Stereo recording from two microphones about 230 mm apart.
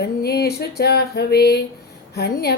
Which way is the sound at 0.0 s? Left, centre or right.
Left.